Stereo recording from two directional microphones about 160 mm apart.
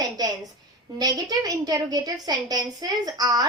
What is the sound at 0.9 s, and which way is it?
A woman's voice, 25° right (ahead or behind).